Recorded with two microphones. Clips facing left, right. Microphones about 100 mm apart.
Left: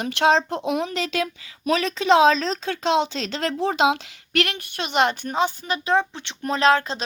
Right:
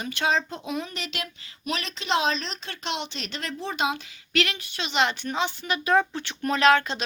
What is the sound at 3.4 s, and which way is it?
Child singing, 90° left.